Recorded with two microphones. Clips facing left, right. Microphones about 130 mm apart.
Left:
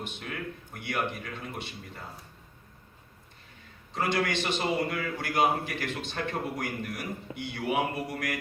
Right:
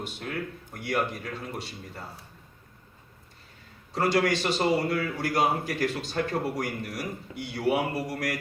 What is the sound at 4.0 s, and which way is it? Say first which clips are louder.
Speech: right 4 dB; 40° right (ahead or behind).